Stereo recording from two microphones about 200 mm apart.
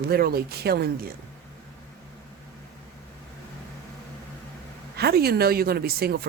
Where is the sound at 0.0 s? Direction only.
50° right (ahead or behind).